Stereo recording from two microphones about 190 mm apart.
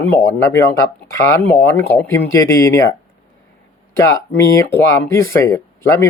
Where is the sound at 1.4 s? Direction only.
10° left (ahead or behind).